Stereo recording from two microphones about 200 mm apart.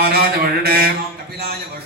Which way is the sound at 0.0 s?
50° right (ahead or behind).